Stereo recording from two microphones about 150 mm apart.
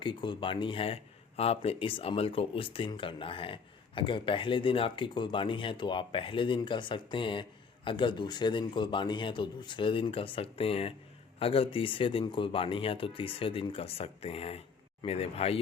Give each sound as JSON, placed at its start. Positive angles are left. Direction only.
{"t": 0.0, "sound": "speech", "side_deg": 30}